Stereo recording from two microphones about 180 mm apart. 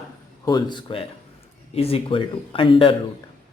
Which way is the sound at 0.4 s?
25° left (ahead or behind).